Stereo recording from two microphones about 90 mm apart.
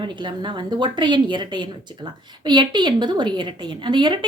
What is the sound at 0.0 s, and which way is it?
A woman's voice, 65° right (ahead or behind).